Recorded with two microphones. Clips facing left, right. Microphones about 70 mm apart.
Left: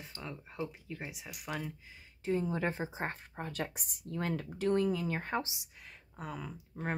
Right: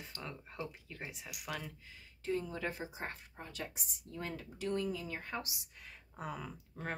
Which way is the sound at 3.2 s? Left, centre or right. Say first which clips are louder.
Left 7 dB; left.